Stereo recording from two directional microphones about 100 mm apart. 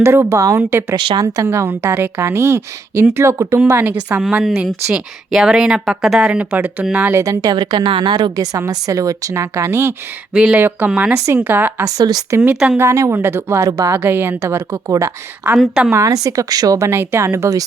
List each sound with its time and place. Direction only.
0.0 s a woman's voice: 25° right (ahead or behind)
0.9 s a woman's voice: 50° right (ahead or behind)
1.2 s a woman's voice: 30° right (ahead or behind)
4.2 s a woman's voice: 5° right (ahead or behind)
7.2 s a woman's voice: 35° right (ahead or behind)
8.4 s speech: 35° right (ahead or behind)
10.3 s a woman's voice: 10° right (ahead or behind)
11.9 s a woman's voice: 40° right (ahead or behind)
13.9 s a woman's voice: 20° right (ahead or behind)
15.5 s a woman's voice: centre (ahead or behind)
15.9 s speech: 35° right (ahead or behind)